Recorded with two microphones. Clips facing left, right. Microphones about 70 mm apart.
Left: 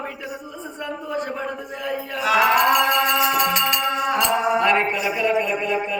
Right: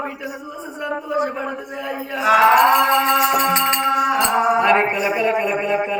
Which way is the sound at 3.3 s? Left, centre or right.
Right.